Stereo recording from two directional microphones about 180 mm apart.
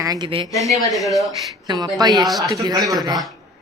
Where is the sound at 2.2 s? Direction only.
Centre (ahead or behind).